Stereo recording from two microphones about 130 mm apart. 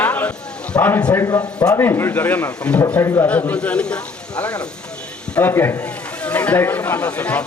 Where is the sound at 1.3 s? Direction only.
30° left (ahead or behind); by 3.9 s 5° left (ahead or behind).